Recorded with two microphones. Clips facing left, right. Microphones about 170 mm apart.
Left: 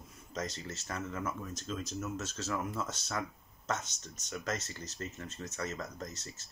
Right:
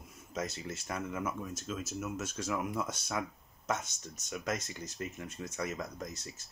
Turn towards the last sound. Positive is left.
turn(degrees=-10)  # may be behind; listen again after turning